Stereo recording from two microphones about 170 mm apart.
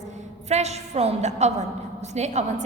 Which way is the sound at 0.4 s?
40° right (ahead or behind).